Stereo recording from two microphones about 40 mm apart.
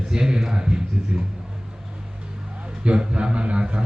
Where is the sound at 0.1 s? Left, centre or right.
Centre.